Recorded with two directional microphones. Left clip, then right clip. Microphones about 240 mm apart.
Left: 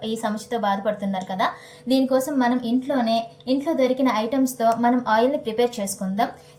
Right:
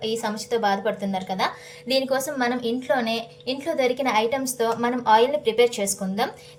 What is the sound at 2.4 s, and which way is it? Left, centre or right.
A woman's voice, right.